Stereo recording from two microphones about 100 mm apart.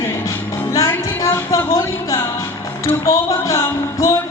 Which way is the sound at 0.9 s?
30° left (ahead or behind).